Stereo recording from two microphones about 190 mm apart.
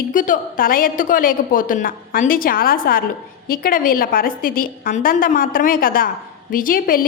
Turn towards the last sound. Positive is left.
turn(degrees=50)  # may be behind; listen again after turning